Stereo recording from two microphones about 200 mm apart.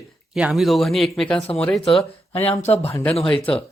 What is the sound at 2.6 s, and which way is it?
Speech, 30° left (ahead or behind).